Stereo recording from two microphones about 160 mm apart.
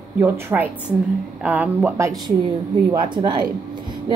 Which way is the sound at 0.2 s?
15° right (ahead or behind).